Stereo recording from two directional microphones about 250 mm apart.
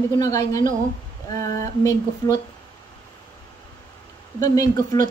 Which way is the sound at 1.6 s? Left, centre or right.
Centre.